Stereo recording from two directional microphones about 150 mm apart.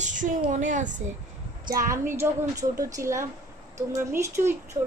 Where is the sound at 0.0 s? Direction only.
60° right (ahead or behind).